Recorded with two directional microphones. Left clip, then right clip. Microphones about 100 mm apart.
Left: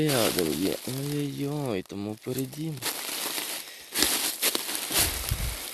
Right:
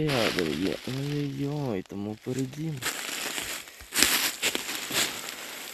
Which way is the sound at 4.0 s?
15° left (ahead or behind).